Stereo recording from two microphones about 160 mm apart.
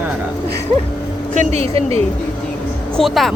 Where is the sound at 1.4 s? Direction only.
40° right (ahead or behind).